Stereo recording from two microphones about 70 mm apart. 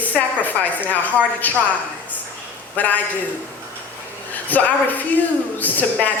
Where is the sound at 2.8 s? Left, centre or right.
Left.